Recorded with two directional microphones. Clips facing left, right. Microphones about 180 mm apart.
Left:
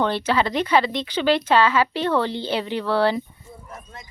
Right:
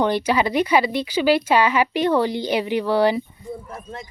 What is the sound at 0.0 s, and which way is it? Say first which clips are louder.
Speech: right 2 dB; 15° right (ahead or behind).